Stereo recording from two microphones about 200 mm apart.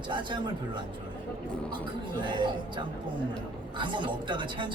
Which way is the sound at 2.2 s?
25° right (ahead or behind).